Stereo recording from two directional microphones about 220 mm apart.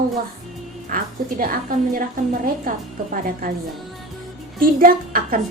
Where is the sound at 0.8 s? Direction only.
40° right (ahead or behind).